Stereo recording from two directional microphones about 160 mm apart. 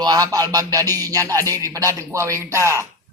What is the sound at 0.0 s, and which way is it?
Music, 25° right (ahead or behind).